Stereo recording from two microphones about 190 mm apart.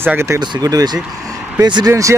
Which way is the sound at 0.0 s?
10° right (ahead or behind).